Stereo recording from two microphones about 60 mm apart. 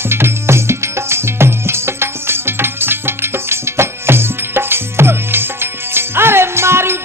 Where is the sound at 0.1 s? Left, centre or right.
Right.